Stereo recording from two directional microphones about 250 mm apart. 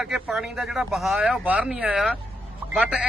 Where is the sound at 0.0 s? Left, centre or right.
Centre.